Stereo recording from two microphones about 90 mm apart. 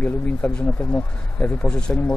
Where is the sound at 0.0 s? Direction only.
15° left (ahead or behind).